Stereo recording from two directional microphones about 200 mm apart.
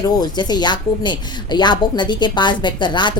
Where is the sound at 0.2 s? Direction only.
20° left (ahead or behind).